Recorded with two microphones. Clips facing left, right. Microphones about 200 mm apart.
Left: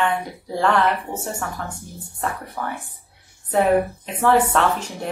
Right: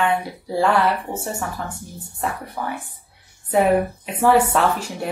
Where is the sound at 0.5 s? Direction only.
10° right (ahead or behind).